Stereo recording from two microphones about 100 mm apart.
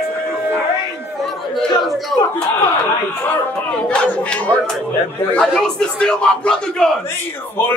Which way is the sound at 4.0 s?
10° left (ahead or behind).